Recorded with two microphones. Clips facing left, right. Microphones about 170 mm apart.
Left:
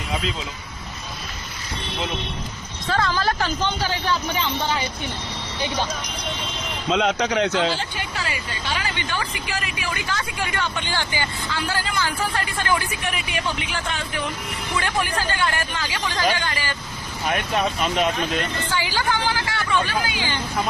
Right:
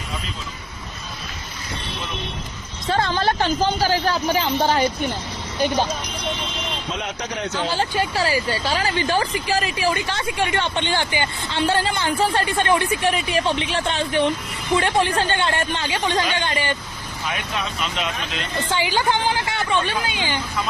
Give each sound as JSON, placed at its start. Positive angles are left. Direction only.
{"t": 2.8, "sound": "speech", "side_deg": -25}
{"t": 6.9, "sound": "a man's voice", "side_deg": 90}
{"t": 7.9, "sound": "speech", "side_deg": -35}
{"t": 17.2, "sound": "speech", "side_deg": 55}
{"t": 18.7, "sound": "speech", "side_deg": -20}